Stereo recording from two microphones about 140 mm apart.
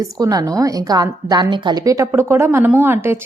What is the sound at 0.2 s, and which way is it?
A woman's voice, 25° right (ahead or behind).